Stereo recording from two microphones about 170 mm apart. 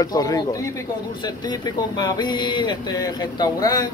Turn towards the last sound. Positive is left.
turn(degrees=25)  # may be behind; listen again after turning